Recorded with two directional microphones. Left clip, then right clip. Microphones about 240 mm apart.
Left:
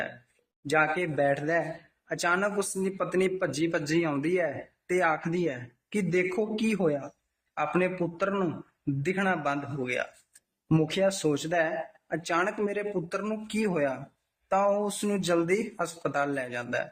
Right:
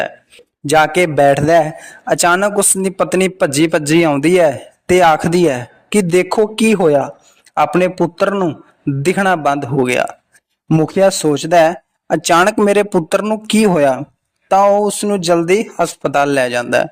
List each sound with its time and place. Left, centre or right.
0.7 s a man's voice: right